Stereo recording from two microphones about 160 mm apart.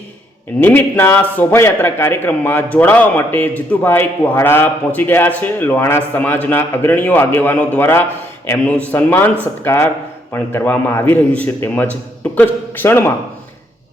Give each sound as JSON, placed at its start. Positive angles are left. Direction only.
{"t": 0.6, "sound": "a man's voice", "side_deg": 15}